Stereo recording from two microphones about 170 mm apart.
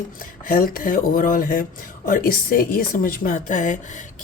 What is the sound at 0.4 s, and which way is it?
A woman's voice, 55° left (ahead or behind).